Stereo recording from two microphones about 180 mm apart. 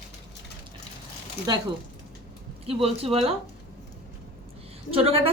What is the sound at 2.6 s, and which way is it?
Speech, 35° right (ahead or behind).